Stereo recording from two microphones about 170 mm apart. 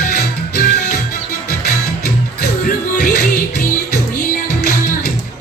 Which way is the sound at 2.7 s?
55° left (ahead or behind).